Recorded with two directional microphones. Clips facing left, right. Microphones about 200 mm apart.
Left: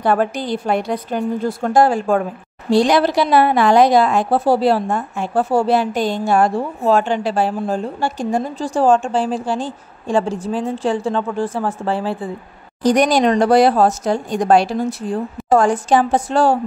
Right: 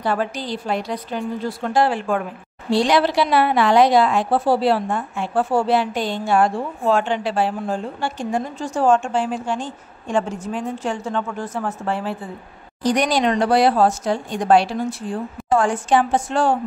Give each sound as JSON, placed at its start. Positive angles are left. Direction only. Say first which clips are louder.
{"t": 0.0, "sound": "a woman's voice", "louder": "left 5 dB", "side_deg": 50}
{"t": 12.8, "sound": "a woman's voice", "louder": "left 5 dB", "side_deg": 45}